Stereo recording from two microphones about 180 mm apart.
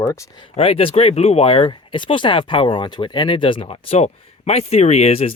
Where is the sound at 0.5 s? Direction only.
35° left (ahead or behind).